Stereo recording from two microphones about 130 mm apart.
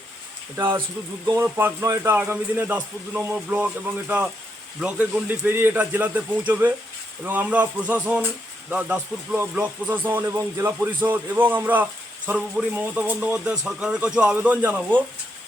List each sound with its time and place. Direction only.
0.5 s speech: 20° right (ahead or behind)
4.8 s speech: 10° right (ahead or behind)